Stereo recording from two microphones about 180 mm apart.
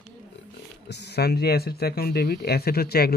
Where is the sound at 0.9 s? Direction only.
65° left (ahead or behind).